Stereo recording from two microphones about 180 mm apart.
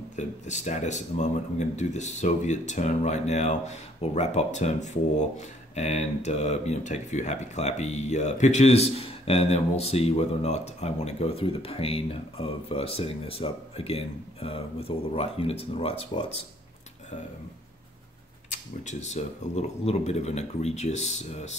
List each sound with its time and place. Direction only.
0.1 s speech: 40° left (ahead or behind)
18.5 s speech: 40° left (ahead or behind)